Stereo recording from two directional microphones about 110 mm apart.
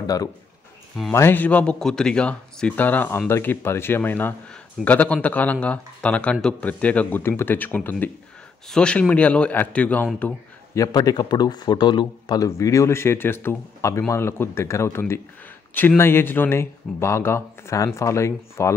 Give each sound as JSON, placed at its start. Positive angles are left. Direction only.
{"t": 0.0, "sound": "speech", "side_deg": 35}
{"t": 1.1, "sound": "a man's voice", "side_deg": 20}
{"t": 10.7, "sound": "a man's voice", "side_deg": 30}
{"t": 12.4, "sound": "a man's voice", "side_deg": 30}